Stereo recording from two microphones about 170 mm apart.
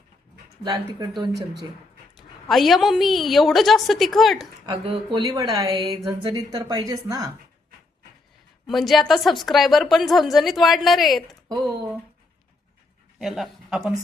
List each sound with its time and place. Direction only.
0.6 s speech: 25° right (ahead or behind)
2.1 s a woman's voice: centre (ahead or behind)
4.6 s speech: 25° right (ahead or behind)
8.6 s a woman's voice: centre (ahead or behind)
11.4 s speech: 25° right (ahead or behind)
13.1 s speech: centre (ahead or behind)